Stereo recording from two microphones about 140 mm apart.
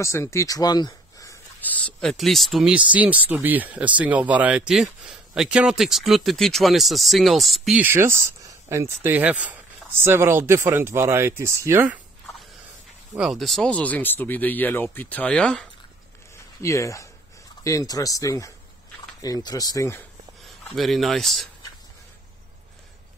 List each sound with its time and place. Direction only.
0.0 s speech: 20° left (ahead or behind)
1.7 s speech: 5° left (ahead or behind)
7.8 s speech: 15° right (ahead or behind)
13.2 s speech: centre (ahead or behind)
16.6 s speech: 20° left (ahead or behind)
20.7 s speech: centre (ahead or behind)